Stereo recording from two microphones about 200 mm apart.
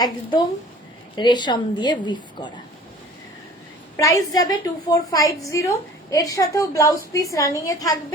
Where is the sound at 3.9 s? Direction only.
15° left (ahead or behind).